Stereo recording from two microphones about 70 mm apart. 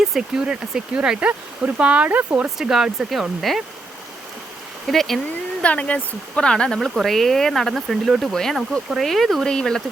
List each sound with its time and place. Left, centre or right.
0.0 s speech: centre; by 2.5 s right
2.6 s speech: centre
4.9 s speech: centre
5.6 s speech: centre
6.7 s speech: centre